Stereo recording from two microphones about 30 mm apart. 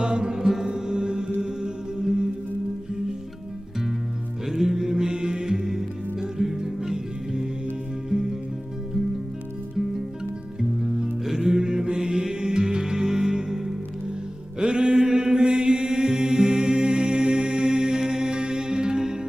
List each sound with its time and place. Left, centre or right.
0.0 s music: right
4.4 s mantra: centre
5.6 s music: centre
10.6 s music: centre
11.5 s music: right
14.6 s mantra: right